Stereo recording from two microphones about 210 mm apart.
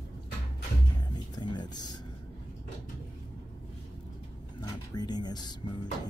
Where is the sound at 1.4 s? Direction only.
20° left (ahead or behind).